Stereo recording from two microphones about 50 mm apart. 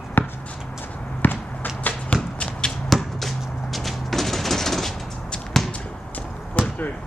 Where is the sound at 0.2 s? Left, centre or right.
Left.